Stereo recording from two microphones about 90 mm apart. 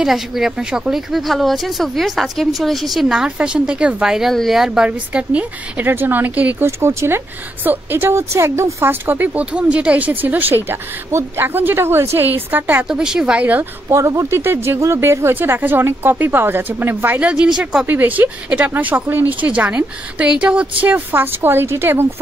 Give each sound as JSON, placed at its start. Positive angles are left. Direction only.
{"t": 0.0, "sound": "speech", "side_deg": -5}
{"t": 6.8, "sound": "a woman's voice", "side_deg": -30}
{"t": 12.8, "sound": "speech", "side_deg": -10}
{"t": 13.8, "sound": "a woman's voice", "side_deg": -35}
{"t": 17.8, "sound": "a woman's voice", "side_deg": -20}